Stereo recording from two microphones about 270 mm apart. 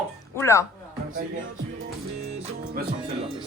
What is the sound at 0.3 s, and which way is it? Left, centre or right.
Speech, centre.